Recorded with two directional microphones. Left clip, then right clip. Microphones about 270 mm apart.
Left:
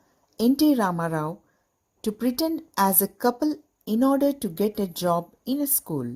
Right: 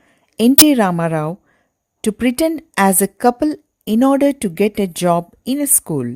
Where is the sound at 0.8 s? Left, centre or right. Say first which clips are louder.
Right 8 dB; right.